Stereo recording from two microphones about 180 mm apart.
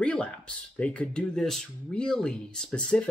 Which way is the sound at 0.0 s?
5° left (ahead or behind).